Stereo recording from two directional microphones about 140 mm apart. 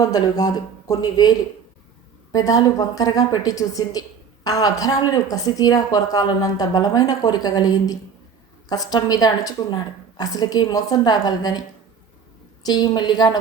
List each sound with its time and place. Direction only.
0.0 s speech: 25° left (ahead or behind)
12.6 s speech: 30° left (ahead or behind)